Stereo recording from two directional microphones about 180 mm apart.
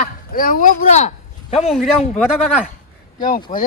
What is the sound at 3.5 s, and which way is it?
Speech, 25° left (ahead or behind).